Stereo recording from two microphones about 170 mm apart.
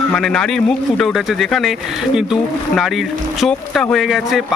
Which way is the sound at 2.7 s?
Centre (ahead or behind).